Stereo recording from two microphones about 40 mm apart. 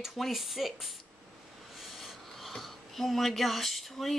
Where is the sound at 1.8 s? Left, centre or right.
Centre.